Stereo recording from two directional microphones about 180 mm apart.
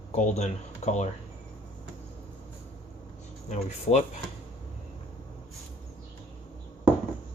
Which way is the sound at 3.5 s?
40° left (ahead or behind).